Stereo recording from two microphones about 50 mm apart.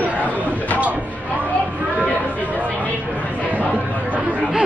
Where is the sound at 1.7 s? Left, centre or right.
Right.